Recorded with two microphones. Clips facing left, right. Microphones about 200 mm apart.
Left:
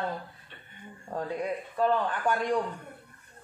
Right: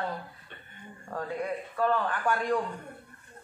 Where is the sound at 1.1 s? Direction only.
20° left (ahead or behind).